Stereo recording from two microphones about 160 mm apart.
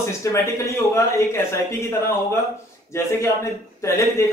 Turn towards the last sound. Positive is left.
turn(degrees=15)  # may be behind; listen again after turning